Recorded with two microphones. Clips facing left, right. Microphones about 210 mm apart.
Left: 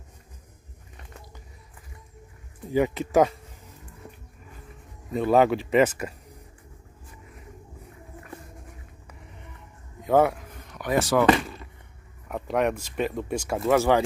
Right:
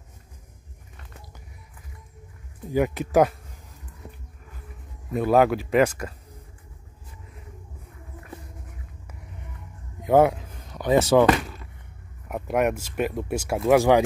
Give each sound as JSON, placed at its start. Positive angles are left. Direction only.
{"t": 2.7, "sound": "speech", "side_deg": 0}
{"t": 5.1, "sound": "speech", "side_deg": -5}
{"t": 10.0, "sound": "speech", "side_deg": -15}
{"t": 10.5, "sound": "a sound", "side_deg": -30}
{"t": 11.3, "sound": "basketball bounce", "side_deg": 0}
{"t": 12.3, "sound": "speech", "side_deg": -10}